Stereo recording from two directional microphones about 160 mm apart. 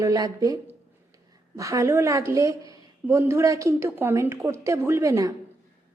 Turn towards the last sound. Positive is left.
turn(degrees=-20)  # may be behind; listen again after turning